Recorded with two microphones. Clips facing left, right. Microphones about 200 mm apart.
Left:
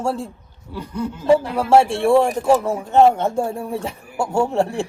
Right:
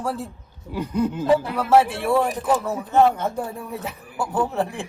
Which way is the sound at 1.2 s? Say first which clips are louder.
Left 7 dB; 30° left (ahead or behind).